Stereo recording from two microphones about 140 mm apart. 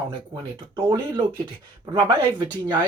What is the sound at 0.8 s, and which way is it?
Speech, 35° right (ahead or behind).